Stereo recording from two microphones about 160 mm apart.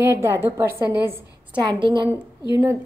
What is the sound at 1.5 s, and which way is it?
Speech, 30° right (ahead or behind).